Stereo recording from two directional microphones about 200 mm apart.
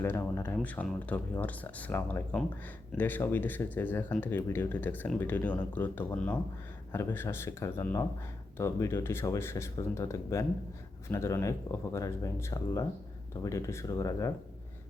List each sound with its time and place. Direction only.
0.0 s speech: 15° left (ahead or behind)